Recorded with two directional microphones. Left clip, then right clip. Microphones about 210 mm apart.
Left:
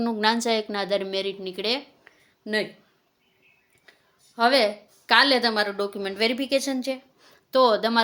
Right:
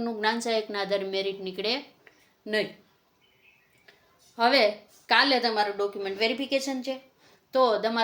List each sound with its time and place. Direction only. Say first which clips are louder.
0.0 s a woman's voice: left 4 dB; 40° left (ahead or behind); by 2.6 s 25° left (ahead or behind)
4.4 s speech: left 2 dB; 25° left (ahead or behind)